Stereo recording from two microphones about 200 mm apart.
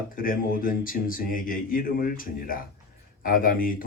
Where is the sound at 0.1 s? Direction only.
45° left (ahead or behind).